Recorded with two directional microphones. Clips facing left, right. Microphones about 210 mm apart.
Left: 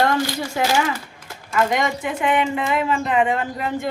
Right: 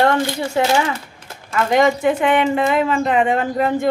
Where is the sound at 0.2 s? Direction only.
25° right (ahead or behind).